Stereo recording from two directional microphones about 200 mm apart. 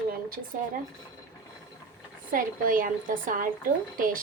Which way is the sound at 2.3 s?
45° right (ahead or behind).